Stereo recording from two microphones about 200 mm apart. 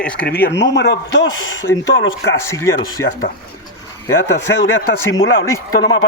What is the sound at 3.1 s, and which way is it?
Speech, 45° left (ahead or behind).